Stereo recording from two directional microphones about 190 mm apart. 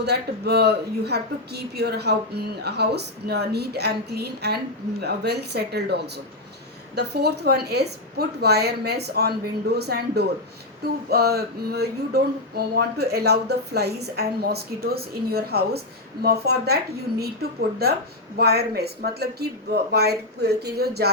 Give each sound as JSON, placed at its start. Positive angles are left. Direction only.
{"t": 0.0, "sound": "speech", "side_deg": -60}
{"t": 17.8, "sound": "speech", "side_deg": -55}